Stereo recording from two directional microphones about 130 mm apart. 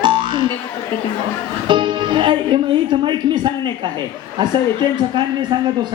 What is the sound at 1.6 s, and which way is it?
Speech, 35° right (ahead or behind).